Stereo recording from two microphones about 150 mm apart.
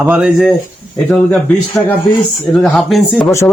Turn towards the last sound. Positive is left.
turn(degrees=0)  # may be behind; listen again after turning